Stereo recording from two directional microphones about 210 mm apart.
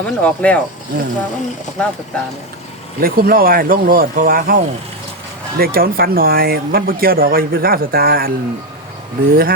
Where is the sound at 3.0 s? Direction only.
45° right (ahead or behind).